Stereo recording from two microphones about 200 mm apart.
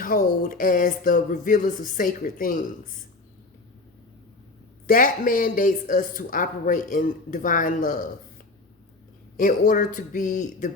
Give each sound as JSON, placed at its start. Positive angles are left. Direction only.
{"t": 0.0, "sound": "speech", "side_deg": 45}
{"t": 4.9, "sound": "speech", "side_deg": 40}
{"t": 9.4, "sound": "speech", "side_deg": 40}